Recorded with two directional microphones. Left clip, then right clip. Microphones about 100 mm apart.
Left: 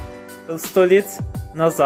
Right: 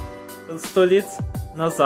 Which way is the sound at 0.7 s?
40° left (ahead or behind).